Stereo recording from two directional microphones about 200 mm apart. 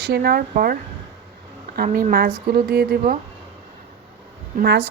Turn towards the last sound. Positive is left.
turn(degrees=-60)  # may be behind; listen again after turning